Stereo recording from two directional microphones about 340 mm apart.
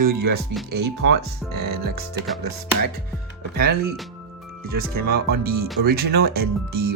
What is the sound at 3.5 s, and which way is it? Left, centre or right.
Speech, right.